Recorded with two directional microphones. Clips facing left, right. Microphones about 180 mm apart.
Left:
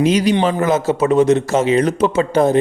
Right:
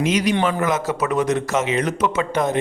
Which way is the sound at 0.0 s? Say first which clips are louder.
Left 5 dB; 35° left (ahead or behind).